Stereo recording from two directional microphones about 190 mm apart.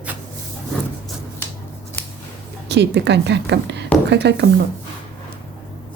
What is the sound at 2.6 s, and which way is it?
A woman's voice, 65° right (ahead or behind).